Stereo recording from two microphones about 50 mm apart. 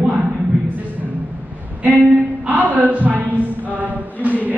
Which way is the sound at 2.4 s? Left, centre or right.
Right.